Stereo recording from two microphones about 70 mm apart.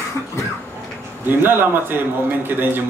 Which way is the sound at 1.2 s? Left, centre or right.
Right.